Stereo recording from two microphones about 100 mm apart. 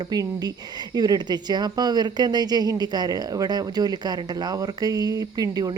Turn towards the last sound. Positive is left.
turn(degrees=-40)  # may be behind; listen again after turning